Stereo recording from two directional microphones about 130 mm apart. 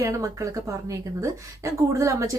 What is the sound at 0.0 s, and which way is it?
A woman's voice, 25° right (ahead or behind).